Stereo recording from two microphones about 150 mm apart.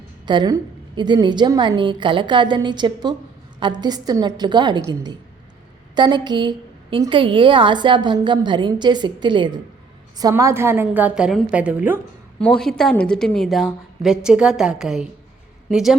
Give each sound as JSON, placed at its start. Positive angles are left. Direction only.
{"t": 0.3, "sound": "a woman's voice", "side_deg": -30}
{"t": 12.4, "sound": "a woman's voice", "side_deg": 5}